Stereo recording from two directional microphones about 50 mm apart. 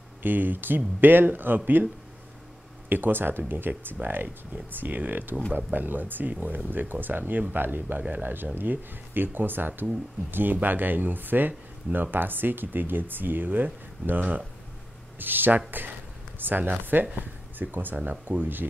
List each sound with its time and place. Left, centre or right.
0.2 s speech: right
2.9 s speech: right